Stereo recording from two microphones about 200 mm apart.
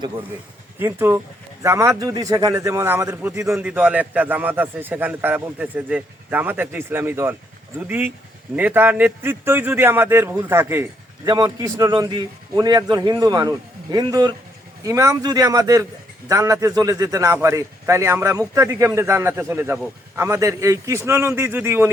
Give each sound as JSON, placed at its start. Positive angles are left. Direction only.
{"t": 0.8, "sound": "a man's voice", "side_deg": -10}